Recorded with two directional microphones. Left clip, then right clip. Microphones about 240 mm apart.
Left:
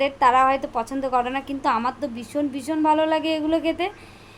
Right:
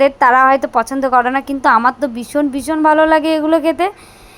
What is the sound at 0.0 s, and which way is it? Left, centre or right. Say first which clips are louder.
A woman's voice: right 8 dB; right.